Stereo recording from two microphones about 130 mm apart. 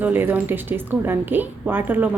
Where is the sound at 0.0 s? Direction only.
15° right (ahead or behind).